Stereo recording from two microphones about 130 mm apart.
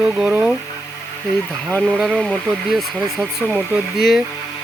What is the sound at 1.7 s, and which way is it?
Speech, centre (ahead or behind).